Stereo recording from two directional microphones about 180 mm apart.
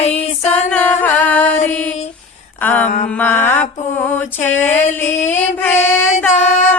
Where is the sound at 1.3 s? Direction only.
10° left (ahead or behind).